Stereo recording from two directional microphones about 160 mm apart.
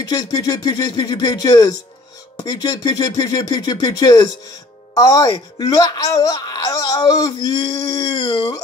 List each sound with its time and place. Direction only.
0.0 s speech: 25° left (ahead or behind)